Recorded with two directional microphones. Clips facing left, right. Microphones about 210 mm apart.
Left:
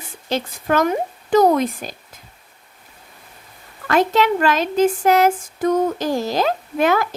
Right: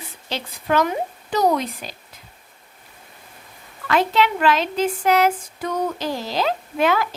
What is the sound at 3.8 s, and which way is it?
Speech, 45° left (ahead or behind).